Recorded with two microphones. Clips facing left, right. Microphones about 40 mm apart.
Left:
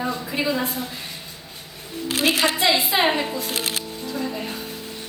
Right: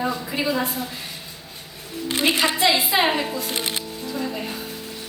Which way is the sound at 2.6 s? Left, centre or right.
Centre.